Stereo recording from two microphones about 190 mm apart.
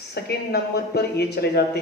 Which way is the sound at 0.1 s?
60° left (ahead or behind).